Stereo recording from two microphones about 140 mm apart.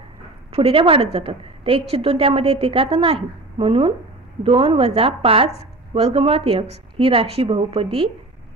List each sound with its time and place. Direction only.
0.5 s a woman's voice: 45° right (ahead or behind)